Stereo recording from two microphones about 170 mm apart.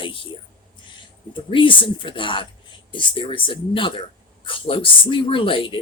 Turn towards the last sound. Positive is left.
turn(degrees=30)  # may be behind; listen again after turning